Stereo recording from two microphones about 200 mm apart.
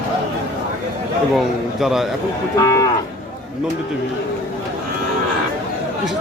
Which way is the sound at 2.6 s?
15° left (ahead or behind).